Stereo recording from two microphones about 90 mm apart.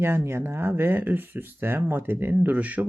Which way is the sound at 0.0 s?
25° right (ahead or behind).